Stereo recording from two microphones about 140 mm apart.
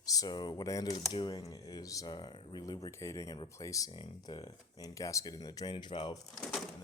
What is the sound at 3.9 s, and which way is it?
Speech, 35° left (ahead or behind).